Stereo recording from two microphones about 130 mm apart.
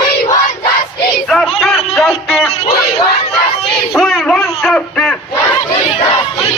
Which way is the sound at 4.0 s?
5° left (ahead or behind).